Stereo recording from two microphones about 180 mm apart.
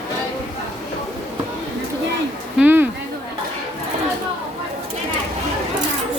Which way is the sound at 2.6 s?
10° right (ahead or behind).